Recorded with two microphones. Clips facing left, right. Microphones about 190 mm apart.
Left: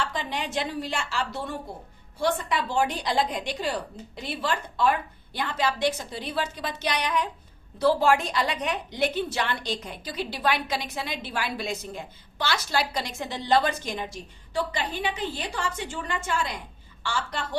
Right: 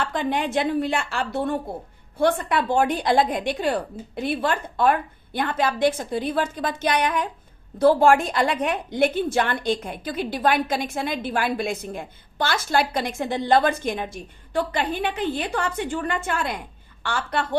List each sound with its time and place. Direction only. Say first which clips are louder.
0.0 s a woman's voice: right 6 dB; 55° right (ahead or behind)